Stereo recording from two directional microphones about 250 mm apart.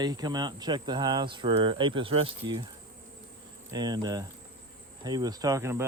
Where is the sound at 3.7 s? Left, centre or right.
Centre.